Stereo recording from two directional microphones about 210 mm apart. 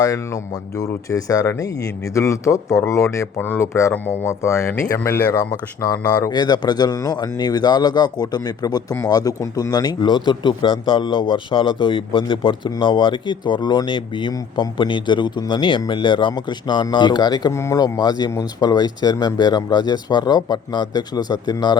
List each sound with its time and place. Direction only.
0.1 s speech: 15° left (ahead or behind)